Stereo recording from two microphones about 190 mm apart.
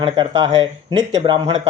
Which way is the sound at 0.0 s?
25° right (ahead or behind).